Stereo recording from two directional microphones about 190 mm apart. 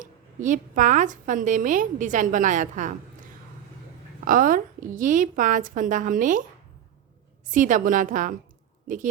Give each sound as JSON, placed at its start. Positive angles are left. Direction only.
{"t": 0.0, "sound": "a woman's voice", "side_deg": -40}
{"t": 4.3, "sound": "a woman's voice", "side_deg": -45}
{"t": 7.4, "sound": "a woman's voice", "side_deg": -45}